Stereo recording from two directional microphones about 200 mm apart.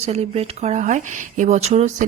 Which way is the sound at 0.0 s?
30° right (ahead or behind).